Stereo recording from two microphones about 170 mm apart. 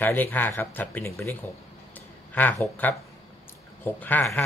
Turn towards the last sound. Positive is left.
turn(degrees=10)  # may be behind; listen again after turning